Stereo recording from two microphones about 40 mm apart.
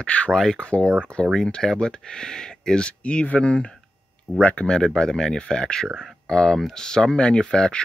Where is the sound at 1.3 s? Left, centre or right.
Centre.